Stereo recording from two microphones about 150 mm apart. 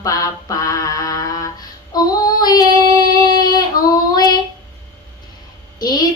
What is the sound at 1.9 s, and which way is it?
Child singing, 25° left (ahead or behind).